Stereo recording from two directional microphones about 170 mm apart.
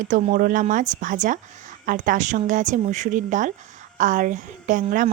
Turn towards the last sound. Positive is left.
turn(degrees=-50)  # may be behind; listen again after turning